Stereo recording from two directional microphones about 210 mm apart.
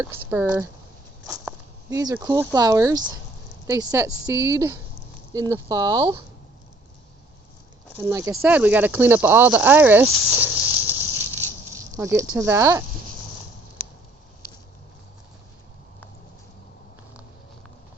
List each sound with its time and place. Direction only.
0.0 s speech: 10° right (ahead or behind)
1.3 s a sound: 15° right (ahead or behind)
2.2 s speech: 15° right (ahead or behind)
7.9 s speech: 15° right (ahead or behind)
11.7 s a sound: 15° right (ahead or behind)
12.3 s speech: 10° right (ahead or behind)